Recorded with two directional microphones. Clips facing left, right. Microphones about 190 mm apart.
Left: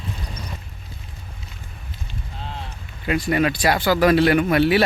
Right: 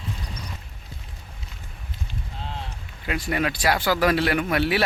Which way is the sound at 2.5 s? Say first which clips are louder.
Left 1 dB; centre (ahead or behind).